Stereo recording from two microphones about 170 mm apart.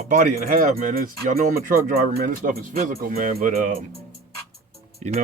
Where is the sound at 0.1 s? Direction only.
50° right (ahead or behind).